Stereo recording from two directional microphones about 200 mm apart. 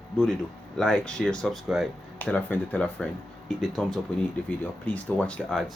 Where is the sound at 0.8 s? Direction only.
5° left (ahead or behind).